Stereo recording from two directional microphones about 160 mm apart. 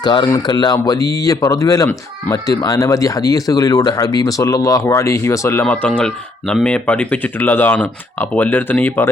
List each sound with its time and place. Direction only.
0.0 s speech: 30° left (ahead or behind); by 9.0 s 10° left (ahead or behind)